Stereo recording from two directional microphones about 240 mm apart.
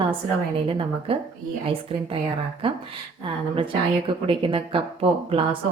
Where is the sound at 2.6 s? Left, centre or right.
Right.